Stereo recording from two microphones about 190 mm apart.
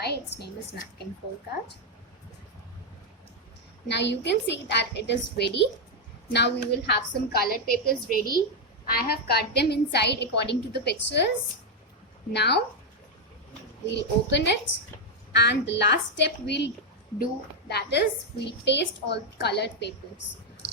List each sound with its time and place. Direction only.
0.0 s a woman's voice: 60° left (ahead or behind)
3.8 s a woman's voice: 65° left (ahead or behind)
12.3 s a woman's voice: 60° left (ahead or behind)
13.9 s a child's voice: 65° left (ahead or behind)